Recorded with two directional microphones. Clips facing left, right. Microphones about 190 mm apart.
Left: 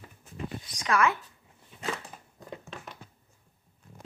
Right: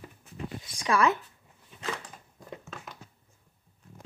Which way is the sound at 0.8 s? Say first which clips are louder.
Right 1 dB; 30° right (ahead or behind).